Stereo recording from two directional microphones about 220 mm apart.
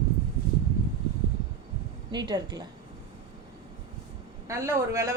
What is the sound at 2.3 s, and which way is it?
Speech, 20° right (ahead or behind).